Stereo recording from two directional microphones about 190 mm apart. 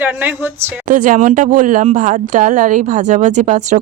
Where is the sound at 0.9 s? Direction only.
45° right (ahead or behind).